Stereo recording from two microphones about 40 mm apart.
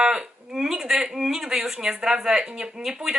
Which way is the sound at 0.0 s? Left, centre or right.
Centre.